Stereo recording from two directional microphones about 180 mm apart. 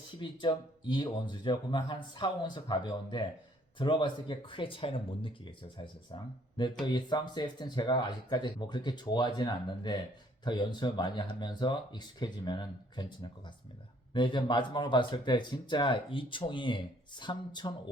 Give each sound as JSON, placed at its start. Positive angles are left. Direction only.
{"t": 0.2, "sound": "speech", "side_deg": 25}